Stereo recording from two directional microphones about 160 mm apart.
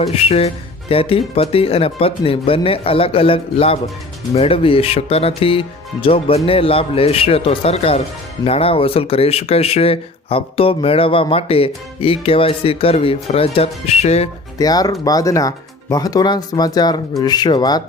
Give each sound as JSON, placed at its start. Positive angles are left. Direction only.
{"t": 0.0, "sound": "speech", "side_deg": 40}
{"t": 14.6, "sound": "speech", "side_deg": 25}